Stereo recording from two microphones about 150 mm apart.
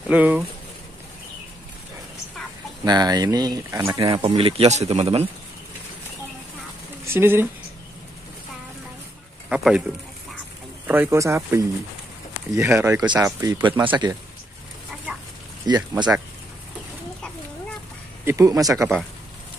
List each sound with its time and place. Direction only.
0.1 s speech: 10° right (ahead or behind)
2.8 s speech: 25° right (ahead or behind)
4.1 s speech: 35° right (ahead or behind)
7.1 s speech: 15° right (ahead or behind)
9.5 s speech: 5° right (ahead or behind)
10.9 s speech: 15° right (ahead or behind)
15.6 s speech: 25° right (ahead or behind)
18.2 s speech: 20° right (ahead or behind)